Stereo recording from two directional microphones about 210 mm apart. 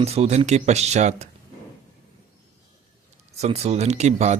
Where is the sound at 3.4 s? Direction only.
30° right (ahead or behind).